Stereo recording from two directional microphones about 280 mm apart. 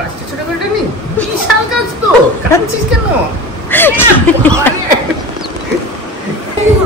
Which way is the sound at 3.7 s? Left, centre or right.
Centre.